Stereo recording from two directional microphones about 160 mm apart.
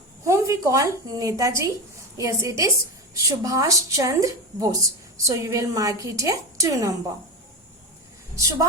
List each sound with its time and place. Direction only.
0.3 s a woman's voice: 20° right (ahead or behind)